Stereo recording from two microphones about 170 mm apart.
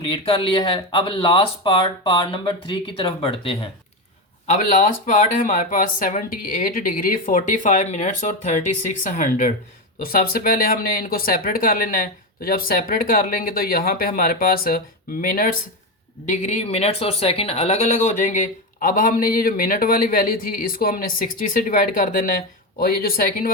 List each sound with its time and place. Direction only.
0.1 s speech: 35° left (ahead or behind)
4.4 s speech: 45° left (ahead or behind)
16.3 s speech: 40° left (ahead or behind); by 23.5 s 55° left (ahead or behind)